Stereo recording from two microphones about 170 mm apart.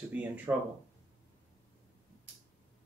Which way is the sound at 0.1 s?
10° right (ahead or behind).